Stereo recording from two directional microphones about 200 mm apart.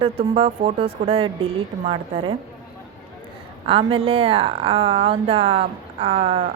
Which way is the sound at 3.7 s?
25° right (ahead or behind).